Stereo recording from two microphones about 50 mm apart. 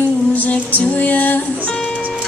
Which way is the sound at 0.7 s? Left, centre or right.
Left.